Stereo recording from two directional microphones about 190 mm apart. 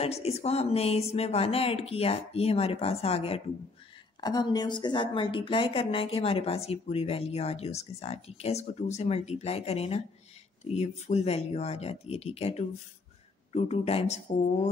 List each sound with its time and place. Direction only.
0.0 s a woman's voice: 35° left (ahead or behind)
4.2 s a woman's voice: 20° left (ahead or behind)